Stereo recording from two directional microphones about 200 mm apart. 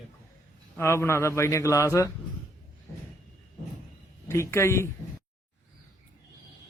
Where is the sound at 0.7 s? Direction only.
10° left (ahead or behind).